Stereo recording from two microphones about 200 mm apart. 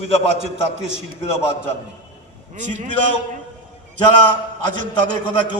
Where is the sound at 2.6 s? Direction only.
35° right (ahead or behind).